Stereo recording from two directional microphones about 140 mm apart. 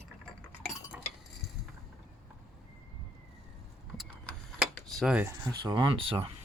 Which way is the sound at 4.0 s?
Centre (ahead or behind).